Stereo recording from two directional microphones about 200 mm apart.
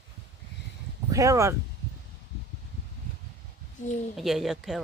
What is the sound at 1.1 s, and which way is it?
Speech, 15° right (ahead or behind).